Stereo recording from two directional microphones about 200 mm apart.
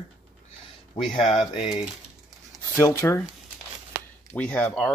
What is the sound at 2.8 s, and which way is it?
Speech, 15° left (ahead or behind).